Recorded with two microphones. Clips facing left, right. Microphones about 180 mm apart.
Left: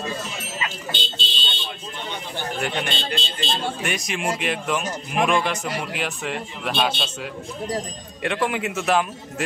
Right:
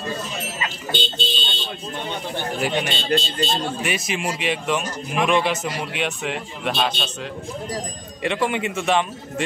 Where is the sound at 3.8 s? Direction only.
5° right (ahead or behind).